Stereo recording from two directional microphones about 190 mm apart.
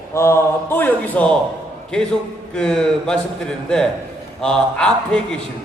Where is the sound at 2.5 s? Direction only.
5° left (ahead or behind).